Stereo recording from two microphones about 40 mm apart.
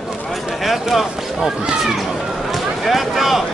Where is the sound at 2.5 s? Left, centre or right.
Centre.